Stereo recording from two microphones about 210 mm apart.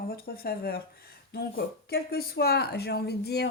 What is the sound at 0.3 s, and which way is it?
Speech, 45° left (ahead or behind).